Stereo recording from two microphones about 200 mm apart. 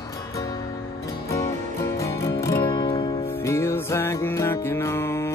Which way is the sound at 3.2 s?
10° left (ahead or behind).